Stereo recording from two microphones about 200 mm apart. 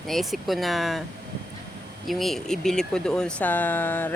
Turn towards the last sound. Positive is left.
turn(degrees=10)  # may be behind; listen again after turning